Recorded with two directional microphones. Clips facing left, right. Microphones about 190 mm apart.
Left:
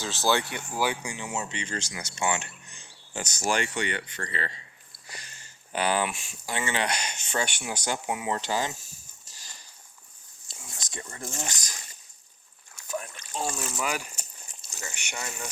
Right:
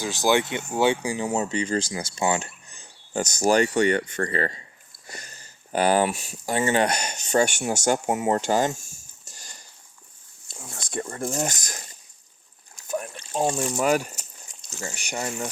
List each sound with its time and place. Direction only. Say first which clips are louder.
0.0 s speech: right 4 dB; 15° right (ahead or behind)
1.0 s speech: right 9 dB; 35° right (ahead or behind)
10.5 s a sound: right 10 dB; 55° right (ahead or behind)
11.3 s speech: right 9 dB; 45° right (ahead or behind)
12.9 s trickle: right 5 dB; 45° right (ahead or behind)
13.7 s speech: right 9 dB; 45° right (ahead or behind)